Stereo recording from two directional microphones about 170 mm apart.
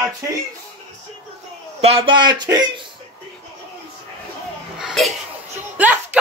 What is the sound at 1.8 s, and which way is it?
A man's voice, 35° right (ahead or behind).